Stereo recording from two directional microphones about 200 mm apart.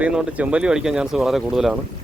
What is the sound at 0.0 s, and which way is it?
Speech, 5° right (ahead or behind).